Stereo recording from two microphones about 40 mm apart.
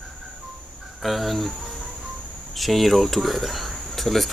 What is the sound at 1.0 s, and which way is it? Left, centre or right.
Cricket, centre.